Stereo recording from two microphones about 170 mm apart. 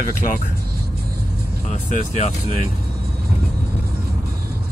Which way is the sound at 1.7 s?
40° left (ahead or behind).